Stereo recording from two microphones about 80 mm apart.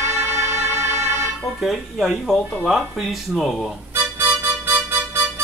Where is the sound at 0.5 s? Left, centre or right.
Right.